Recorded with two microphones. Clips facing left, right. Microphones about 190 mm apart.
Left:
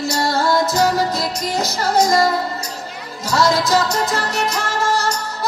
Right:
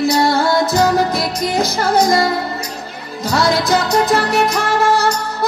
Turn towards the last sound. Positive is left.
turn(degrees=-55)  # may be behind; listen again after turning